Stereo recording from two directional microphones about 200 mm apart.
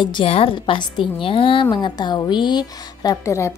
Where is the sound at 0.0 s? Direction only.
25° left (ahead or behind).